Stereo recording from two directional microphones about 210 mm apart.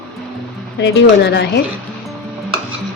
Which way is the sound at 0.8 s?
55° left (ahead or behind).